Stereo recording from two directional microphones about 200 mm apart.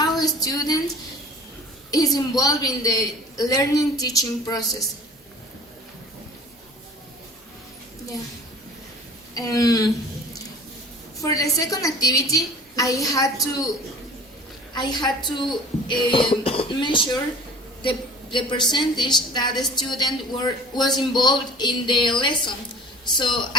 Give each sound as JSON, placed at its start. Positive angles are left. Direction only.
{"t": 0.0, "sound": "a sound", "side_deg": 20}
{"t": 1.9, "sound": "a woman's voice", "side_deg": 20}
{"t": 9.3, "sound": "a woman's voice", "side_deg": 15}
{"t": 11.2, "sound": "a woman's voice", "side_deg": 15}
{"t": 14.8, "sound": "a woman's voice", "side_deg": 20}